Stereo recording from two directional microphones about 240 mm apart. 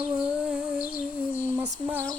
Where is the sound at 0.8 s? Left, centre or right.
Left.